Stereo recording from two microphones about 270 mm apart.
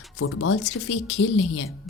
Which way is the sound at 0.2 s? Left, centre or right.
Left.